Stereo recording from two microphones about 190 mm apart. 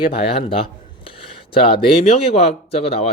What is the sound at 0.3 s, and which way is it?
Speech, 30° left (ahead or behind).